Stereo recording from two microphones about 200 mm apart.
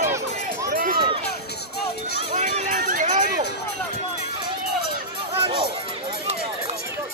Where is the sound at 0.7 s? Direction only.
40° right (ahead or behind).